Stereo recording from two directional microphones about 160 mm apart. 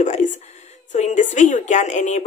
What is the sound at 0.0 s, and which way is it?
A woman's voice, 50° left (ahead or behind).